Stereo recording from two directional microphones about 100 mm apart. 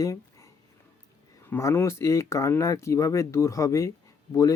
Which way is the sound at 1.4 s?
20° left (ahead or behind).